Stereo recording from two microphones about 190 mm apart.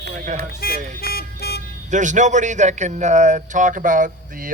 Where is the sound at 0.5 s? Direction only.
50° left (ahead or behind).